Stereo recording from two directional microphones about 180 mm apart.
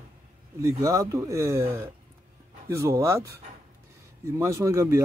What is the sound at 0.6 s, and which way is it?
Speech, 20° right (ahead or behind).